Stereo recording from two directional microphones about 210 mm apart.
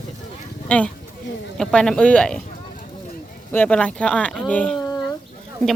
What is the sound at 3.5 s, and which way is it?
A woman's voice, 5° left (ahead or behind).